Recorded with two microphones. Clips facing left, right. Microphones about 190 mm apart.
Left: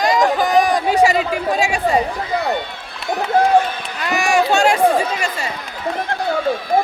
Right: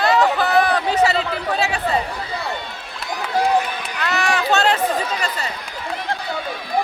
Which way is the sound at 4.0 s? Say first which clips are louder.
Left 5 dB; 10° left (ahead or behind).